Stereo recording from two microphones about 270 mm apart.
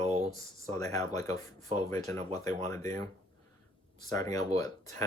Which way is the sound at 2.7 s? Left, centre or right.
Centre.